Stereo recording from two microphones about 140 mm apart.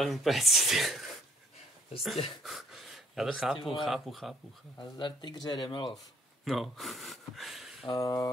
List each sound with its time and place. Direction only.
0.0 s speech: centre (ahead or behind)
2.4 s gasp: centre (ahead or behind)
3.6 s speech: centre (ahead or behind)
4.7 s speech: 35° left (ahead or behind)
6.4 s speech: centre (ahead or behind)
7.9 s a sound: 25° left (ahead or behind)